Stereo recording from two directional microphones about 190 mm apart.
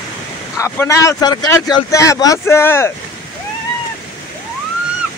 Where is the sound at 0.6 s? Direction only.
15° left (ahead or behind).